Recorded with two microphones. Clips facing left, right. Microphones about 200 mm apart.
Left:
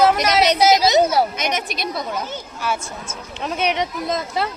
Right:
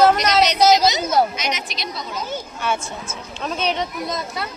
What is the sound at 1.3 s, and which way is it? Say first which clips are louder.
Speech: left 3 dB; 55° left (ahead or behind).